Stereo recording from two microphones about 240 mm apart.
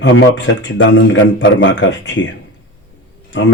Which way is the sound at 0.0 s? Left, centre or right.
Left.